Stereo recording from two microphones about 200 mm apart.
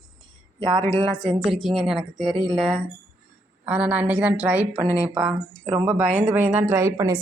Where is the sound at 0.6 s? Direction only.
25° right (ahead or behind).